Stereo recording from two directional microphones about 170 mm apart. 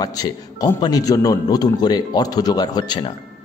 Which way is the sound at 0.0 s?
20° left (ahead or behind).